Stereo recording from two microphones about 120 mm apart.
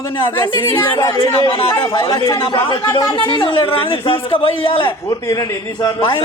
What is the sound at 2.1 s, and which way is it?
Speech, 25° left (ahead or behind).